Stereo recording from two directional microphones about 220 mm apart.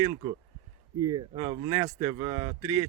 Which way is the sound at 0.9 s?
10° right (ahead or behind).